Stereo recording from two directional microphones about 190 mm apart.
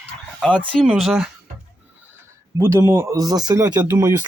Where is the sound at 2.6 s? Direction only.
15° right (ahead or behind).